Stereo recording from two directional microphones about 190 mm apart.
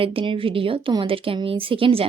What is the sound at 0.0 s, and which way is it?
A woman's voice, 30° right (ahead or behind).